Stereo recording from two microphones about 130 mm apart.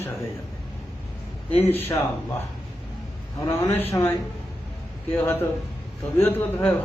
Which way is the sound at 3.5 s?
20° left (ahead or behind).